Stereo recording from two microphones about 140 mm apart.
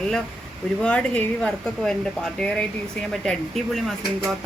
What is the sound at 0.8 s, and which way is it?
A woman's voice, 10° left (ahead or behind).